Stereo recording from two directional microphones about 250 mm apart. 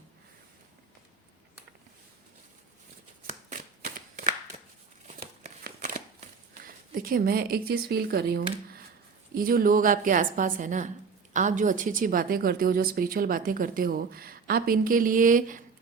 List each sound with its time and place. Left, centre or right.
3.5 s shuffling cards: right
5.0 s a sound: right
9.3 s a woman's voice: right